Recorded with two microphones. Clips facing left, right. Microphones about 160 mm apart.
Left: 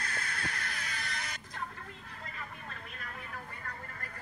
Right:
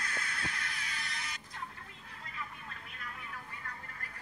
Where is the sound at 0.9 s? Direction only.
70° left (ahead or behind); by 4.1 s 50° left (ahead or behind).